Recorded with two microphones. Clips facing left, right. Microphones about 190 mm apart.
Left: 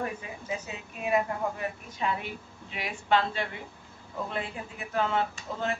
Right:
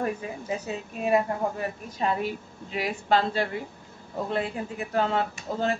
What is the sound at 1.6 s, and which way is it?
Speech, 40° right (ahead or behind).